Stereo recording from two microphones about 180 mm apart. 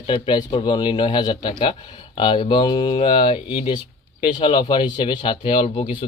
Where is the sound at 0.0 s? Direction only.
25° left (ahead or behind).